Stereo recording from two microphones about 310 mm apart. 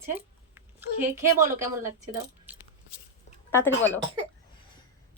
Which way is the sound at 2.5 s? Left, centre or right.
Centre.